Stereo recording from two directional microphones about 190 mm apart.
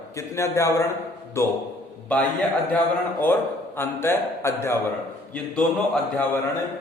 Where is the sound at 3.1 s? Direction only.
10° left (ahead or behind).